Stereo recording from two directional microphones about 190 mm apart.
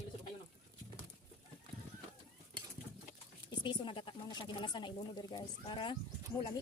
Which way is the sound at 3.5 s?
25° left (ahead or behind).